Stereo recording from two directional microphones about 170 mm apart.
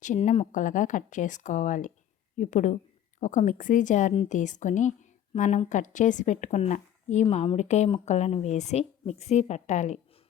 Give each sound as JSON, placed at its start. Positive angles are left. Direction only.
{"t": 0.0, "sound": "speech", "side_deg": 45}